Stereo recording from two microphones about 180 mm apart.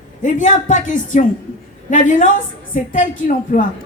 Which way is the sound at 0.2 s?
45° left (ahead or behind).